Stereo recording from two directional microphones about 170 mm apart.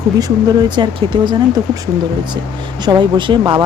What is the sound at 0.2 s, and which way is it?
Speech, 25° right (ahead or behind).